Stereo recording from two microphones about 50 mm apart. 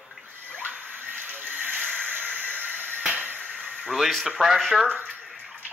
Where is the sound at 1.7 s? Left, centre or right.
Right.